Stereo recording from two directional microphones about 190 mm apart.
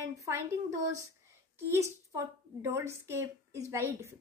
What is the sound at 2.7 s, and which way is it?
A woman's voice, 15° right (ahead or behind).